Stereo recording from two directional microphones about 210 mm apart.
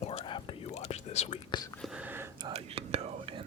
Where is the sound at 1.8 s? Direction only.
5° right (ahead or behind).